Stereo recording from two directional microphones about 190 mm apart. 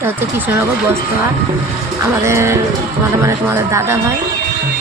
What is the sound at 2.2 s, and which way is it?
Speech, 15° right (ahead or behind).